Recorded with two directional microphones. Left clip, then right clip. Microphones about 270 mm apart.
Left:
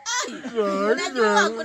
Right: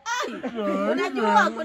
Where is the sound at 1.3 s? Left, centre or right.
Right.